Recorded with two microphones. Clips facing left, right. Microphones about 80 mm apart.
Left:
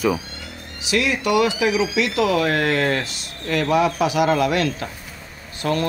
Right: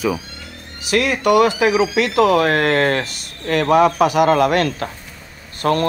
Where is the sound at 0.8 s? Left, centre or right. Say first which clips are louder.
Right 4 dB; right.